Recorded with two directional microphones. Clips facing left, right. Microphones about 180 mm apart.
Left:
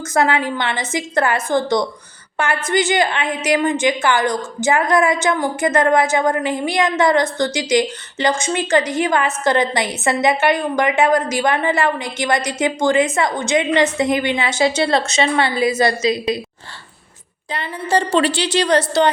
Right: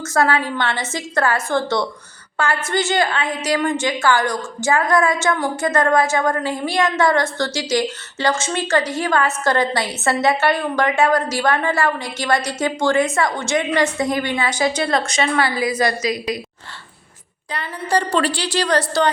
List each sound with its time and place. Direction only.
0.1 s a woman's voice: 20° left (ahead or behind)
17.5 s a woman's voice: 25° left (ahead or behind)